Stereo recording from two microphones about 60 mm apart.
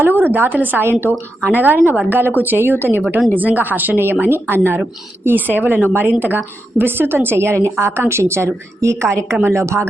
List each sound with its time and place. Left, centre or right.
0.0 s a woman's voice: right